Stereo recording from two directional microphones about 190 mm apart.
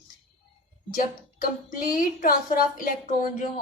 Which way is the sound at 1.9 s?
50° left (ahead or behind).